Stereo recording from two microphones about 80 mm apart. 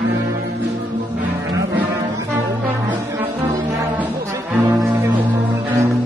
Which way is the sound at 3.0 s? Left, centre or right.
Right.